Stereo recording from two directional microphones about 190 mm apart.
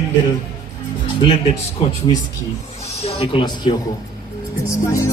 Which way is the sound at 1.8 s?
30° left (ahead or behind).